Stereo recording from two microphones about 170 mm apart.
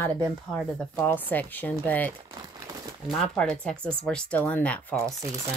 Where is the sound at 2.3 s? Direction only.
25° right (ahead or behind).